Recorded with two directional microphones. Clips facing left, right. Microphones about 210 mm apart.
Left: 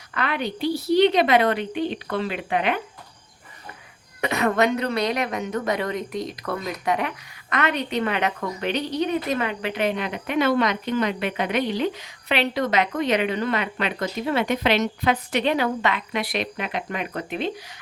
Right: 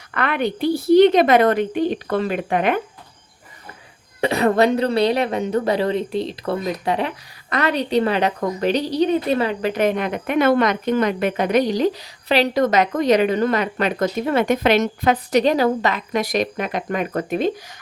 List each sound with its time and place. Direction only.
0.1 s a woman's voice: 55° right (ahead or behind)
4.2 s a woman's voice: 30° right (ahead or behind)